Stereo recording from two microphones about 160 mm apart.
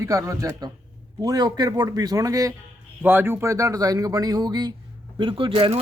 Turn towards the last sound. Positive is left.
turn(degrees=-35)  # may be behind; listen again after turning